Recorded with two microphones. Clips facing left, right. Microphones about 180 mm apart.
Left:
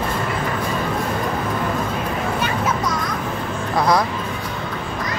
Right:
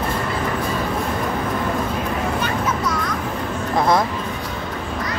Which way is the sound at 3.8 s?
25° right (ahead or behind).